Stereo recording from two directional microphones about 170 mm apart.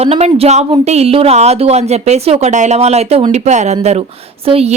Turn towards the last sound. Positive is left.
turn(degrees=-35)  # may be behind; listen again after turning